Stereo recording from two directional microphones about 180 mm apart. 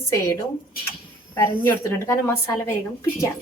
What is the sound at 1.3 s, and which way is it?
A woman's voice, 15° left (ahead or behind).